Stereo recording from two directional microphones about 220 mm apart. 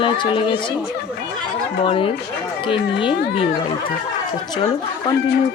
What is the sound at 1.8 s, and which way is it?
Speech, 25° left (ahead or behind).